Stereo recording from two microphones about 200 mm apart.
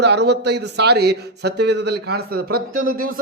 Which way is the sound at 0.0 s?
55° right (ahead or behind).